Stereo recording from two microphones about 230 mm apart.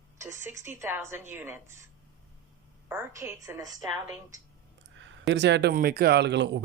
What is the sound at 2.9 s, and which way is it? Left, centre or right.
Speech, centre.